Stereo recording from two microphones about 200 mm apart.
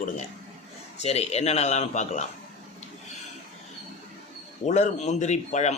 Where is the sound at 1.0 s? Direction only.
30° left (ahead or behind).